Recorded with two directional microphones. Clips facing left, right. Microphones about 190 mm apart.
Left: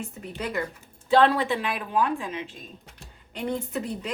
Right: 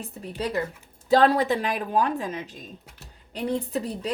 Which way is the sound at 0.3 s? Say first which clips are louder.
Right 3 dB; 35° right (ahead or behind).